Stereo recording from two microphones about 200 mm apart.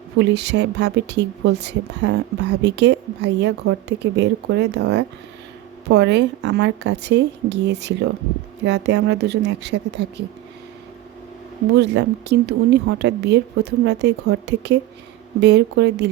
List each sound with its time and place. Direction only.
0.2 s speech: 60° right (ahead or behind)
11.7 s speech: 60° right (ahead or behind)